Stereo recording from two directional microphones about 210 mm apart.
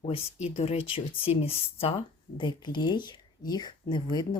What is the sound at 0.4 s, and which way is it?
Speech, 30° left (ahead or behind).